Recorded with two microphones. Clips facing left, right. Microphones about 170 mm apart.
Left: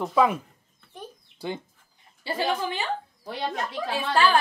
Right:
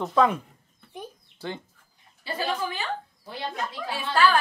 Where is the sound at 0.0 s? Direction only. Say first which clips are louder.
Even; 5° left (ahead or behind).